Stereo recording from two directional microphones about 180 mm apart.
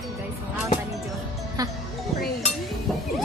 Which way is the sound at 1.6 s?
20° right (ahead or behind).